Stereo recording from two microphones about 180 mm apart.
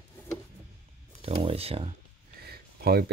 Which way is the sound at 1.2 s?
30° right (ahead or behind).